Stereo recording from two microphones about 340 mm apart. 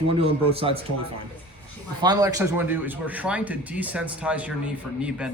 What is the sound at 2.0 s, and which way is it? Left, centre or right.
A man's voice, centre.